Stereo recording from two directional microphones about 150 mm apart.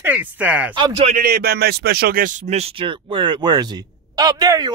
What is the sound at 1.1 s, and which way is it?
A man's voice, 80° right.